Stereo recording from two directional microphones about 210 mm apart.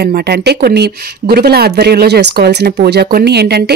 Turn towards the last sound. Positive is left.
turn(degrees=-50)  # may be behind; listen again after turning